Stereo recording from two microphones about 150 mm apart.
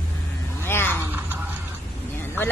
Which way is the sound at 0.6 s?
15° left (ahead or behind).